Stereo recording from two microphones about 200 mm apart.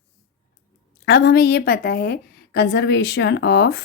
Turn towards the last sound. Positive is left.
turn(degrees=55)  # may be behind; listen again after turning